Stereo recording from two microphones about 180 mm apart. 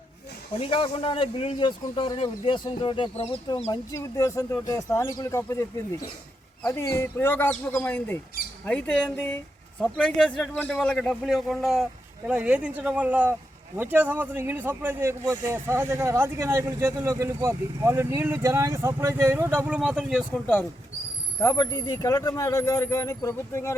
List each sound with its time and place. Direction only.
0.6 s a man's voice: 30° left (ahead or behind); by 20.2 s 5° right (ahead or behind)
21.4 s speech: 20° left (ahead or behind)